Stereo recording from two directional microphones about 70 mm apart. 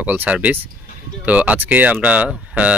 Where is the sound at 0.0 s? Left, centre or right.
Right.